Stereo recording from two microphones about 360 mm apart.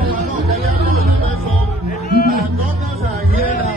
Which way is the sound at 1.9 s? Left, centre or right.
Left.